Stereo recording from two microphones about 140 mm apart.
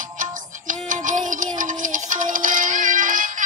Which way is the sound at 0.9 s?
65° right (ahead or behind).